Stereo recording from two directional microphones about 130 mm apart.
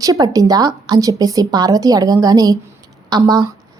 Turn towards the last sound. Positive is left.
turn(degrees=-30)  # may be behind; listen again after turning